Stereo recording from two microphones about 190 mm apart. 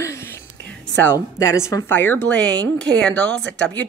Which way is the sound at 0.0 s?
15° left (ahead or behind).